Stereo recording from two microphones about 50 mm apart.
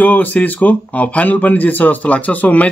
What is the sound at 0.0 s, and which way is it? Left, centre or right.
Speech, left.